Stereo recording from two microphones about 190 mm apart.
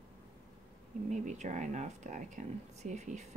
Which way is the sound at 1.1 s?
40° right (ahead or behind).